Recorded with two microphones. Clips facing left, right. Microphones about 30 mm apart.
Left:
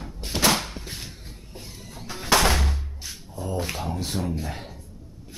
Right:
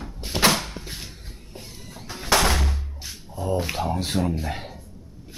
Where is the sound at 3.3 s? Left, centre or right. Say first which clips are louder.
Right 4 dB; centre.